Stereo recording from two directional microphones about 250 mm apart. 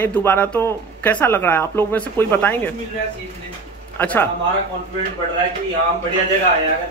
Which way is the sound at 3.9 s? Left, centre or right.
Centre.